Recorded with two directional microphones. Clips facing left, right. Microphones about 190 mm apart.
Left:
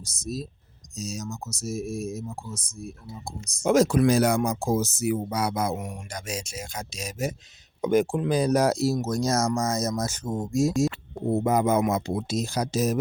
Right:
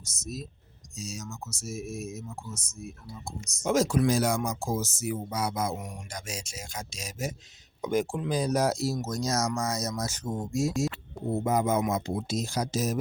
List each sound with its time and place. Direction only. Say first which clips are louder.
0.0 s speech: left 6 dB; 35° left (ahead or behind)
3.6 s speech: left 5 dB; 60° left (ahead or behind); by 10.9 s 45° left (ahead or behind)
11.4 s speech: left 3 dB; 65° left (ahead or behind)